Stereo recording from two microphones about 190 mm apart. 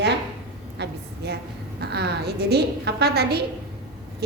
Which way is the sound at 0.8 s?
60° right (ahead or behind).